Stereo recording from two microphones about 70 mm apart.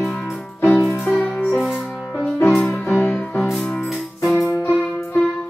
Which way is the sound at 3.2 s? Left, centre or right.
Centre.